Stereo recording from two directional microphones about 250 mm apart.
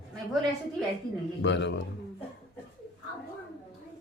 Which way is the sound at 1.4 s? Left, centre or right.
Left.